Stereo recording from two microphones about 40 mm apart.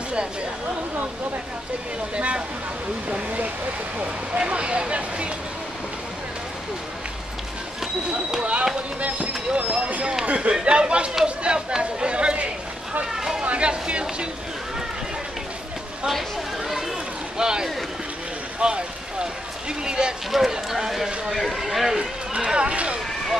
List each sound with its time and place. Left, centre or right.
2.1 s speech: right
8.4 s speech: right
9.5 s vehicle: right
10.2 s speech: right
10.6 s speech: right
16.1 s speech: centre
17.4 s speech: centre
18.6 s run: right
19.8 s speech: right
20.2 s speech: centre
20.9 s speech: centre
22.3 s speech: right